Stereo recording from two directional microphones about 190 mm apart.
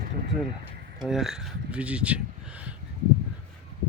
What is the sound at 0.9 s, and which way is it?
Speech, 5° right (ahead or behind).